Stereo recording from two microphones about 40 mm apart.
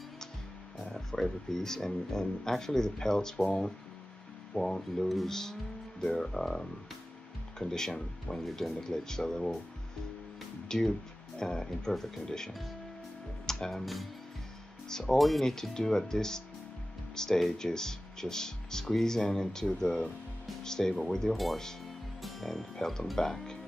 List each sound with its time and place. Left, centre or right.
0.9 s speech: centre
4.6 s speech: centre
8.5 s speech: centre
8.8 s speech: centre
10.7 s speech: centre
13.5 s speech: centre
14.9 s speech: centre
15.1 s speech: centre
15.4 s speech: centre
22.2 s music: centre
22.8 s speech: centre